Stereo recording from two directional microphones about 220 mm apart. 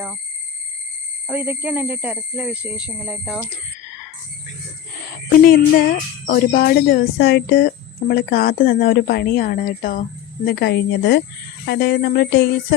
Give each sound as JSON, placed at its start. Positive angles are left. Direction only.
{"t": 1.3, "sound": "speech", "side_deg": -10}
{"t": 5.3, "sound": "a woman's voice", "side_deg": 40}